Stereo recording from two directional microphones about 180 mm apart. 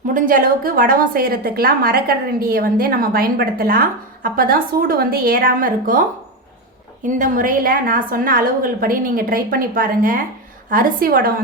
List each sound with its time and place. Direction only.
0.1 s a woman's voice: 50° right (ahead or behind)
7.2 s a woman's voice: 50° right (ahead or behind)